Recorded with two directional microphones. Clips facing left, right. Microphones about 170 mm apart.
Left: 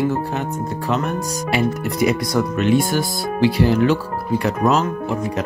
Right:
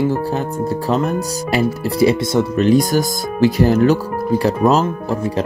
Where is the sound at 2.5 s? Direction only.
40° right (ahead or behind).